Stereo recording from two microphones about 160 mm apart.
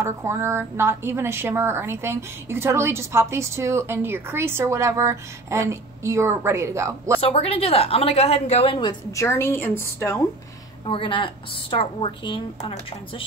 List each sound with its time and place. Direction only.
0.0 s a woman's voice: 15° right (ahead or behind)
7.2 s a woman's voice: 35° left (ahead or behind)
9.1 s a woman's voice: 15° left (ahead or behind)
10.9 s a woman's voice: 30° left (ahead or behind)